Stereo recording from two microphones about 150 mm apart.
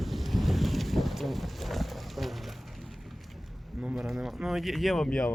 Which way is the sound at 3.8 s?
5° right (ahead or behind).